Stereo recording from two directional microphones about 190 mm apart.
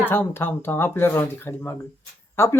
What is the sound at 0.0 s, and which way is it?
Speech, 10° left (ahead or behind).